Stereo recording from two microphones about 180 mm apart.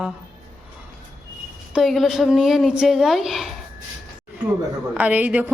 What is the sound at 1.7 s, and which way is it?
A woman's voice, centre (ahead or behind).